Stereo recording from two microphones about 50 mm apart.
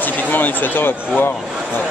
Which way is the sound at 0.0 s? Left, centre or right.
Left.